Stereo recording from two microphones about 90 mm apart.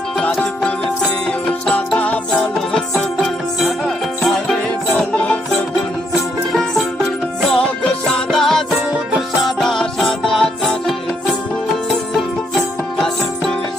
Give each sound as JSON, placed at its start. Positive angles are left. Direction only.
{"t": 2.0, "sound": "music", "side_deg": 15}
{"t": 2.6, "sound": "music", "side_deg": 5}